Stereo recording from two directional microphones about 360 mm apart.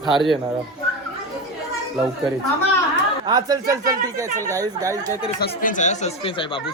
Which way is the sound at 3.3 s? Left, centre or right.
Centre.